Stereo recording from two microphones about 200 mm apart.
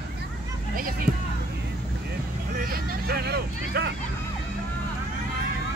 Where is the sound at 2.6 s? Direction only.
45° right (ahead or behind).